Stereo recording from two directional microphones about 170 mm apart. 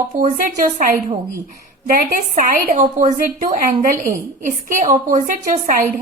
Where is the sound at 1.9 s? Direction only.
55° right (ahead or behind).